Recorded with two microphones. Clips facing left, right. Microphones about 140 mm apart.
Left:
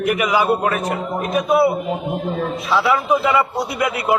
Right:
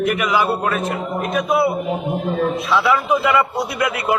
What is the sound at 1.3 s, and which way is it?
Speech, 5° left (ahead or behind).